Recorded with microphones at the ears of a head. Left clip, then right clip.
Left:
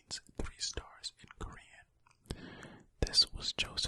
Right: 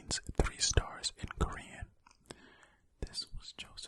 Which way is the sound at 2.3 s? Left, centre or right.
Left.